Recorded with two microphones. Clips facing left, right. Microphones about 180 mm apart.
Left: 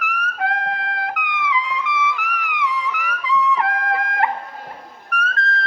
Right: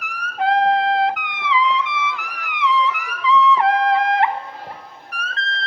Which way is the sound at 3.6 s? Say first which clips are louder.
Right 5 dB; 25° right (ahead or behind).